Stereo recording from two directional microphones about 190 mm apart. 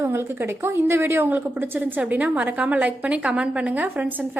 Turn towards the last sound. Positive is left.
turn(degrees=-10)  # may be behind; listen again after turning